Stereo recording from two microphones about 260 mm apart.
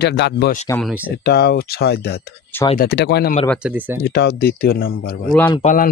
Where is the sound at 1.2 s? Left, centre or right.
Left.